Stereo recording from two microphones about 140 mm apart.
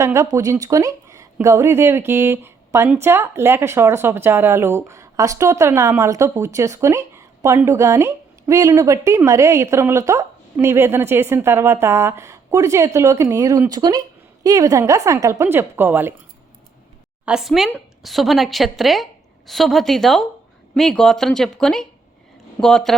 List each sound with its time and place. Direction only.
0.0 s speech: 20° right (ahead or behind)
17.2 s speech: 5° right (ahead or behind)